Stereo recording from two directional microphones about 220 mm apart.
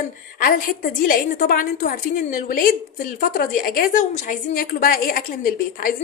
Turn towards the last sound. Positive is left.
turn(degrees=40)  # may be behind; listen again after turning